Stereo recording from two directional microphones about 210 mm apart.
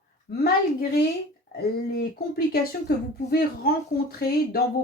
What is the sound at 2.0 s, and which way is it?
Speech, 45° left (ahead or behind).